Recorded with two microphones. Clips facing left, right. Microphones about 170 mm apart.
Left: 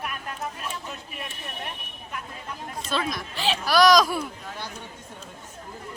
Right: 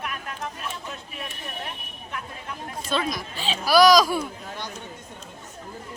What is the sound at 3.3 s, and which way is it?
Speech, 75° left (ahead or behind).